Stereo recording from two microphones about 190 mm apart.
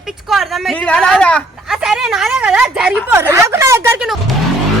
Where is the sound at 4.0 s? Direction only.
Centre (ahead or behind).